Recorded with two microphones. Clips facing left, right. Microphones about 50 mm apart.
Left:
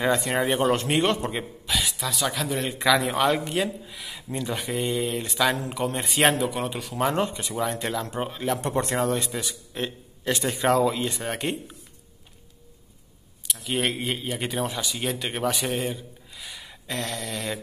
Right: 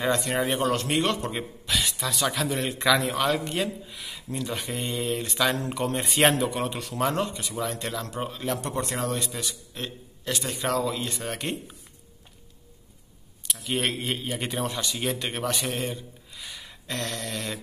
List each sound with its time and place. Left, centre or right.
0.0 s speech: centre
0.6 s a man's voice: centre
1.7 s a man's voice: centre
7.2 s speech: left
7.8 s a man's voice: centre
8.6 s speech: left
8.9 s a man's voice: centre
13.5 s a man's voice: centre